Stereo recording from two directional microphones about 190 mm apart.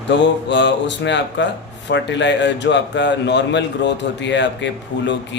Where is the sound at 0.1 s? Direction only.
70° left (ahead or behind).